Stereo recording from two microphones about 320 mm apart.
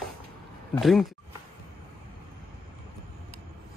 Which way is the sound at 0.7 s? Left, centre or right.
Centre.